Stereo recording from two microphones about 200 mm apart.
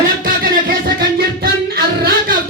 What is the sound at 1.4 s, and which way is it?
Music, 50° right (ahead or behind).